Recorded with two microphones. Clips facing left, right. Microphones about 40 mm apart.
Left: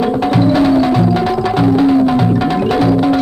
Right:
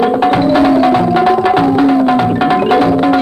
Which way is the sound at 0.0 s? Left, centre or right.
Right.